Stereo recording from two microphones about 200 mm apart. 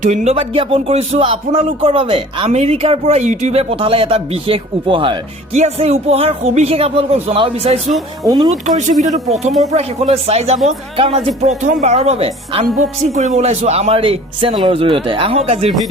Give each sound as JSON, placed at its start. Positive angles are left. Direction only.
{"t": 0.0, "sound": "a man's voice", "side_deg": -35}
{"t": 8.2, "sound": "speech", "side_deg": -20}
{"t": 8.6, "sound": "a man's voice", "side_deg": -40}